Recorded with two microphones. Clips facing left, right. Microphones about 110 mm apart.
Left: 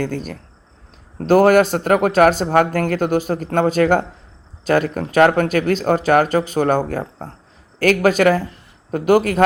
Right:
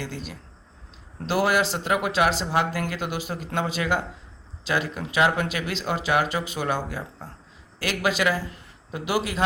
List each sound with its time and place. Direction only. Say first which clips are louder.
0.0 s speech: left 11 dB; 50° left (ahead or behind)